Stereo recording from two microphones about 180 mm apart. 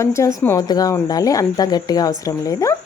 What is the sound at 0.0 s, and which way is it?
Speech, 15° left (ahead or behind).